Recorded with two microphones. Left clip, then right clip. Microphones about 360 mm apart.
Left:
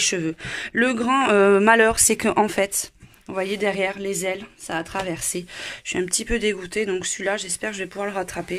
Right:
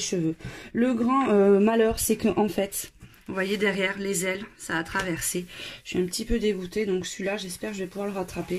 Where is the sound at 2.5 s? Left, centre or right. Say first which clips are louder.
Left 6 dB; centre.